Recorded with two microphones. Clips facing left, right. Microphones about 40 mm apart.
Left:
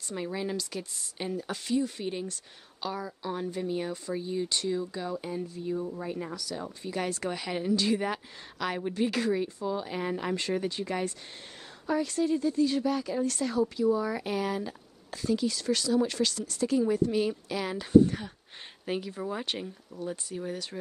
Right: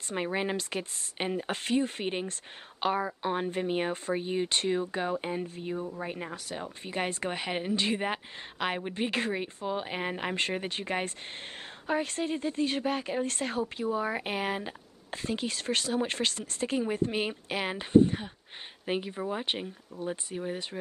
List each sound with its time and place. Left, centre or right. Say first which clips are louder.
0.1 s speech: right 2 dB; right